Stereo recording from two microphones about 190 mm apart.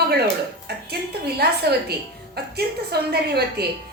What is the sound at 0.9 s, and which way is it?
A woman's voice, 55° right (ahead or behind).